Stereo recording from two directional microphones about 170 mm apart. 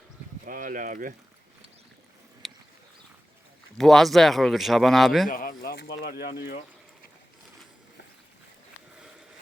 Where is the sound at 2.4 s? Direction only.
Centre (ahead or behind).